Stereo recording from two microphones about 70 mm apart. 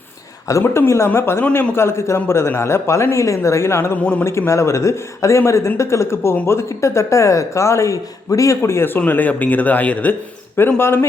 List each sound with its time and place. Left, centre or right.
0.6 s speech: left
9.0 s speech: left
10.8 s speech: left